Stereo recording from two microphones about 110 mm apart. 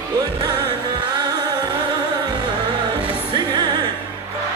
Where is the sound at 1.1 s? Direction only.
40° right (ahead or behind).